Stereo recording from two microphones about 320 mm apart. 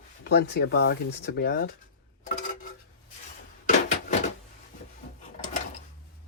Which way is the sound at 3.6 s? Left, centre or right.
Left.